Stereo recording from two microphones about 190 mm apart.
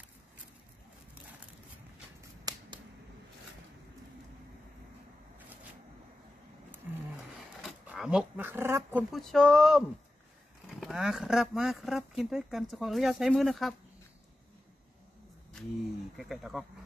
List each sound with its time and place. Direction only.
2.5 s a sound: 20° right (ahead or behind)
6.8 s roaring cats: 5° right (ahead or behind)
7.6 s speech: 5° right (ahead or behind)
9.1 s speech: centre (ahead or behind)
16.2 s speech: centre (ahead or behind)